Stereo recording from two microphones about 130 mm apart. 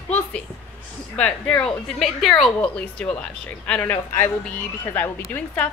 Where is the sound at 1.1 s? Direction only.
10° left (ahead or behind).